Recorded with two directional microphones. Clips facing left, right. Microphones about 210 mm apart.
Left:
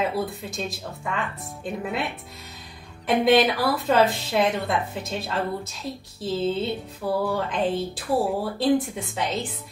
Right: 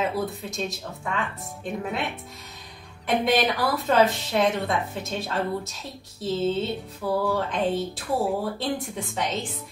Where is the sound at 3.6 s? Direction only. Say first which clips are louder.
Left 1 dB; centre (ahead or behind).